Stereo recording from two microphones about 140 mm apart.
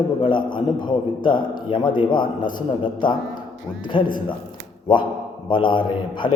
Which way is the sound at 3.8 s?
35° left (ahead or behind).